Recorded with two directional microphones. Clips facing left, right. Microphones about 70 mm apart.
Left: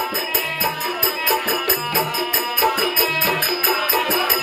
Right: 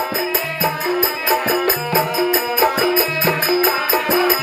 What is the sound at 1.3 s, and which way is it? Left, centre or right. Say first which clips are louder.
Music: right 4 dB; right.